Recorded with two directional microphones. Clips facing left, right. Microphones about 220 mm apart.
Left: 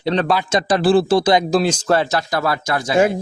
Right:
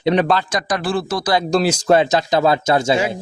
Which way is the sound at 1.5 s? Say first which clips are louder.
Even; 5° right (ahead or behind).